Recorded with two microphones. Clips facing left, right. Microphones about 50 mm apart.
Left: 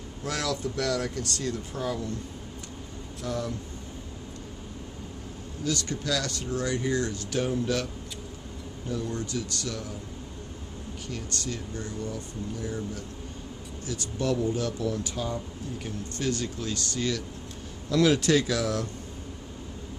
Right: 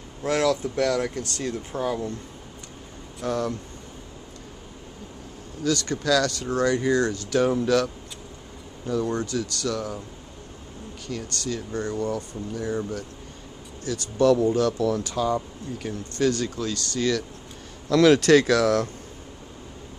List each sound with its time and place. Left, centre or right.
0.2 s speech: right
3.2 s speech: right
5.7 s speech: right
7.3 s speech: right
9.0 s speech: right
11.4 s speech: right
16.2 s speech: right
17.8 s speech: right